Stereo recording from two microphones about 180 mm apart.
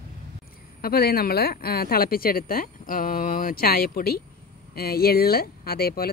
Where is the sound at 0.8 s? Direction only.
60° left (ahead or behind).